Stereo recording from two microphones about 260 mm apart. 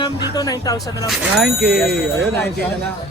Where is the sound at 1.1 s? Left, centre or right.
Centre.